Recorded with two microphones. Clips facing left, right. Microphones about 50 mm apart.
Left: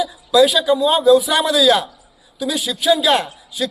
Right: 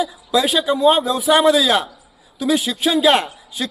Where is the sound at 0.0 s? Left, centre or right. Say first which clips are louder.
Left 5 dB; right.